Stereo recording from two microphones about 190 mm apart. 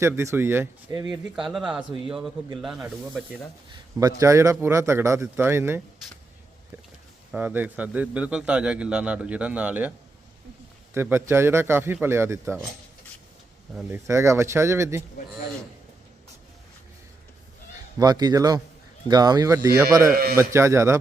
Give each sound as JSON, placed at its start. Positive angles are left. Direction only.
{"t": 0.0, "sound": "a man's voice", "side_deg": -15}
{"t": 1.1, "sound": "speech", "side_deg": 0}
{"t": 3.9, "sound": "a man's voice", "side_deg": -15}
{"t": 7.3, "sound": "a man's voice", "side_deg": -10}
{"t": 10.9, "sound": "a man's voice", "side_deg": -10}
{"t": 13.7, "sound": "a man's voice", "side_deg": -15}
{"t": 18.0, "sound": "a man's voice", "side_deg": -20}